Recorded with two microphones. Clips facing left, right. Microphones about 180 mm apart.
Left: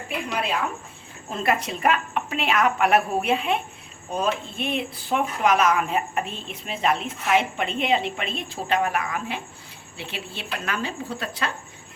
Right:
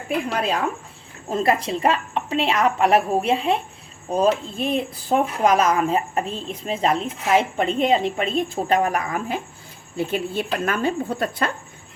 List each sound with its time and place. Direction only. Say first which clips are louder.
0.3 s speech: right 1 dB; 40° right (ahead or behind)
1.6 s a woman's voice: right 2 dB; 30° right (ahead or behind); by 11.5 s 50° right (ahead or behind)